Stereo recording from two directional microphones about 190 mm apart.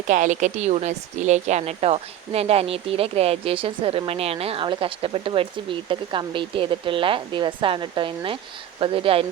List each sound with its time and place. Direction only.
0.1 s a woman's voice: 40° right (ahead or behind)